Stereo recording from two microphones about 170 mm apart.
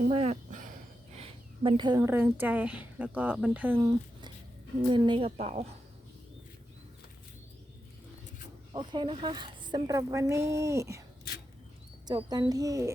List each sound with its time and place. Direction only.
0.1 s a woman's voice: 35° right (ahead or behind)
1.1 s a sound: 35° right (ahead or behind)
2.0 s speech: 15° right (ahead or behind)
4.9 s a woman's voice: 30° right (ahead or behind)
8.7 s a woman's voice: 25° right (ahead or behind)
12.0 s a woman's voice: 25° right (ahead or behind)